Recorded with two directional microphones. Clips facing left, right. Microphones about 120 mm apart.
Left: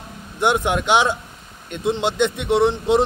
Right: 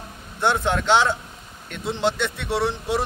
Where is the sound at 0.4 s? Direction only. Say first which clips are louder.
Left 2 dB; 15° left (ahead or behind).